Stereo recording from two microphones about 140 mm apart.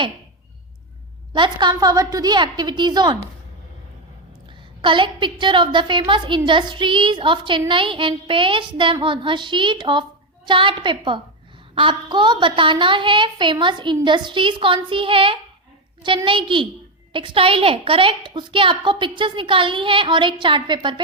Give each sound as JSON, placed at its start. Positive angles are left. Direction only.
{"t": 1.3, "sound": "a woman's voice", "side_deg": -35}
{"t": 4.8, "sound": "a woman's voice", "side_deg": -35}